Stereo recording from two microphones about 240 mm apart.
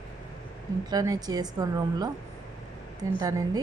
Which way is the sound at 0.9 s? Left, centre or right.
Centre.